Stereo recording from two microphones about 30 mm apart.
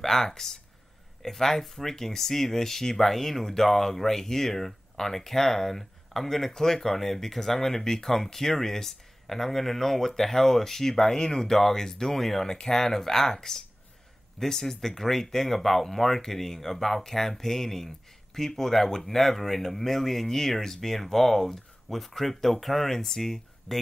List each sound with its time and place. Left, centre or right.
0.0 s speech: centre
12.4 s speech: left